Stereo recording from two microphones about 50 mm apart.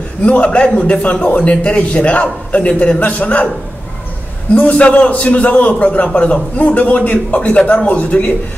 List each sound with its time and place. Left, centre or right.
0.2 s a man's voice: left
4.6 s a man's voice: left